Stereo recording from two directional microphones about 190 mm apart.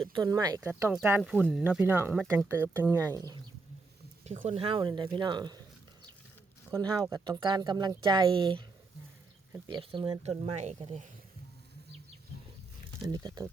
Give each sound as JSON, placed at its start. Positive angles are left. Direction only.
{"t": 0.1, "sound": "speech", "side_deg": -20}
{"t": 1.2, "sound": "speech", "side_deg": 0}
{"t": 4.3, "sound": "speech", "side_deg": -35}
{"t": 13.1, "sound": "speech", "side_deg": -20}